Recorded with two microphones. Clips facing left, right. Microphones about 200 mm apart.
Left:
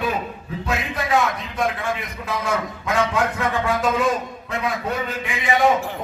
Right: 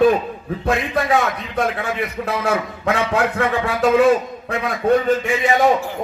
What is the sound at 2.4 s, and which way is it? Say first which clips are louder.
A man's voice: right 4 dB; 65° right (ahead or behind).